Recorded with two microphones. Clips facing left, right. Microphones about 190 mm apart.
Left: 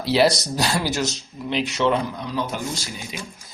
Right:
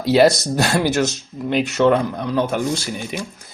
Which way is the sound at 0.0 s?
45° right (ahead or behind).